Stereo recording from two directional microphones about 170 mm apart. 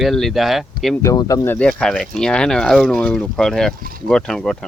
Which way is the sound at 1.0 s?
20° left (ahead or behind).